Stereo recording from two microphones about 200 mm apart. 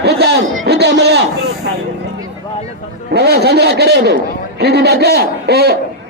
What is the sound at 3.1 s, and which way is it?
A man's voice, 55° right (ahead or behind).